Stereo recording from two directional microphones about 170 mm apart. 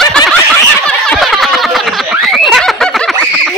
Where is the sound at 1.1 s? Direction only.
Centre (ahead or behind).